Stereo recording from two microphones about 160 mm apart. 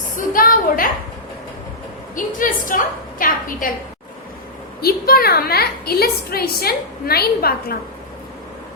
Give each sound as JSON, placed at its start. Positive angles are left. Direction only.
{"t": 0.2, "sound": "a woman's voice", "side_deg": 60}
{"t": 2.1, "sound": "a woman's voice", "side_deg": 55}
{"t": 4.8, "sound": "a woman's voice", "side_deg": 70}